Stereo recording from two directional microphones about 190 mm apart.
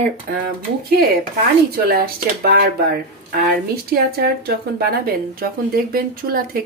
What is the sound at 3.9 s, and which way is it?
Speech, 55° right (ahead or behind).